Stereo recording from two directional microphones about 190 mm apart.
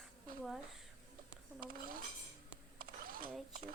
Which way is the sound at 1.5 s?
50° right (ahead or behind).